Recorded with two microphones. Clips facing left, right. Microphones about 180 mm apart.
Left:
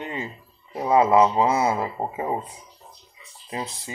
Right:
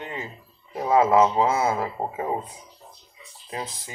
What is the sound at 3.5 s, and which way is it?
Speech, 20° left (ahead or behind).